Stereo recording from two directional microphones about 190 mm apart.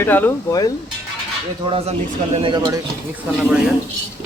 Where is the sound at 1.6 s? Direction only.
30° right (ahead or behind).